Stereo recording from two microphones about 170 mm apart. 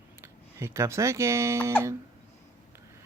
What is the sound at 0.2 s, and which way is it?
Speech, 15° right (ahead or behind).